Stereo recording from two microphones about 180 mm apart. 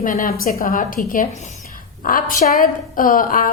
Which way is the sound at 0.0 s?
50° left (ahead or behind).